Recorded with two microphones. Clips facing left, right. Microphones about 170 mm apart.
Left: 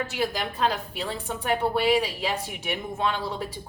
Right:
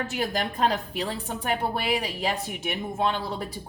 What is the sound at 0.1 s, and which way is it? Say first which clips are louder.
A woman's voice: even; 45° right (ahead or behind).